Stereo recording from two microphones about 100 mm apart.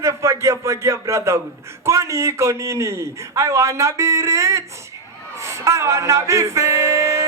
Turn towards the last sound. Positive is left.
turn(degrees=-30)  # may be behind; listen again after turning